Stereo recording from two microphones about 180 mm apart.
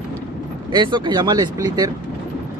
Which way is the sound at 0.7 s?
25° right (ahead or behind).